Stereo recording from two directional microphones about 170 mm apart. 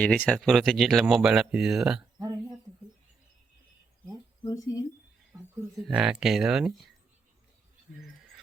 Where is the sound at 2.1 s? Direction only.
20° right (ahead or behind).